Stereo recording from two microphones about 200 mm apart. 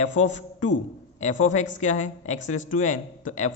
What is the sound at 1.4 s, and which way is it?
A man's voice, 35° left (ahead or behind).